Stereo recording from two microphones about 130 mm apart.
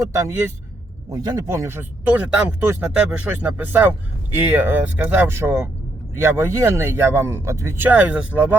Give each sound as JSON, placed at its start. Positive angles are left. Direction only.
{"t": 0.2, "sound": "speech", "side_deg": -20}